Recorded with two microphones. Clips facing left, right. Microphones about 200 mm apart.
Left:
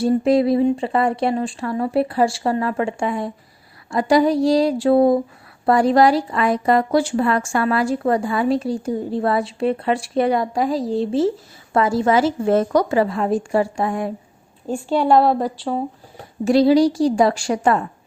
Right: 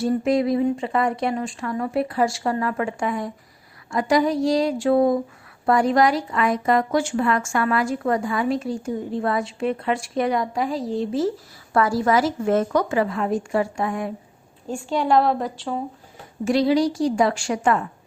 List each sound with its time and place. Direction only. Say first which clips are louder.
0.0 s a woman's voice: left 4 dB; 30° left (ahead or behind)